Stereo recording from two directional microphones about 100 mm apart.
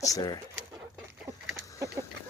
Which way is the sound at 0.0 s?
40° left (ahead or behind).